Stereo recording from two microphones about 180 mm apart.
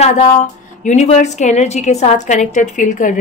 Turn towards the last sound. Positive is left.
turn(degrees=45)  # may be behind; listen again after turning